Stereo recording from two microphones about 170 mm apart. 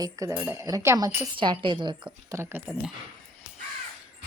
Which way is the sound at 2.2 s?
15° right (ahead or behind).